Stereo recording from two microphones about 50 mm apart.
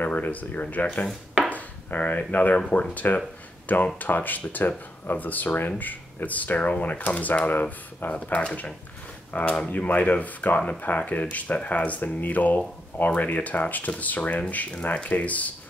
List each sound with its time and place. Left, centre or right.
0.0 s speech: left